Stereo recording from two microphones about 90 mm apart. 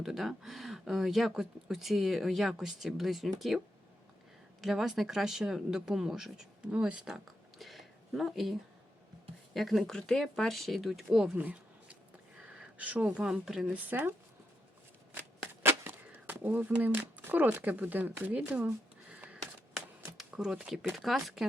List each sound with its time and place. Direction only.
0.0 s speech: 5° right (ahead or behind)
4.6 s speech: 5° right (ahead or behind)
9.6 s speech: centre (ahead or behind)
11.3 s a sound: 20° right (ahead or behind)
13.1 s speech: 10° right (ahead or behind)
13.7 s speech: 20° right (ahead or behind)
15.6 s speech: 25° right (ahead or behind)
19.7 s a sound: 5° right (ahead or behind)
20.9 s speech: centre (ahead or behind)